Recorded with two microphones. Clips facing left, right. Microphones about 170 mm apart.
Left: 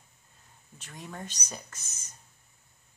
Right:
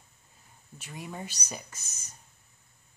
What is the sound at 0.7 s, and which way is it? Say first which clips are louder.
Speech: right 2 dB; 10° right (ahead or behind).